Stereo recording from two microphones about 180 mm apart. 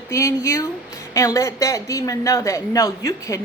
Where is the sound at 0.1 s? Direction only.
15° left (ahead or behind).